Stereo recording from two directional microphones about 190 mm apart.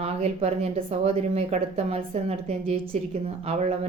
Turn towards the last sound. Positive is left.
turn(degrees=-35)  # may be behind; listen again after turning